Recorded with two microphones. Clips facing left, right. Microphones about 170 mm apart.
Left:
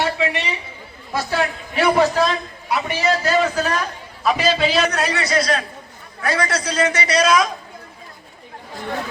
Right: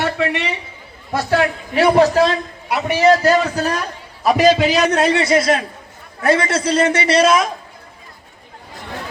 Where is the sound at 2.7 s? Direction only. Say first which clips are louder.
Right 6 dB; 65° right (ahead or behind).